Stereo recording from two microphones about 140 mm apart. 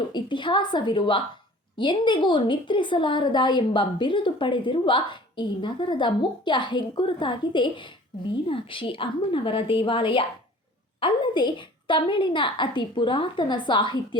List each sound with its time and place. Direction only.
0.1 s a woman's voice: 35° left (ahead or behind)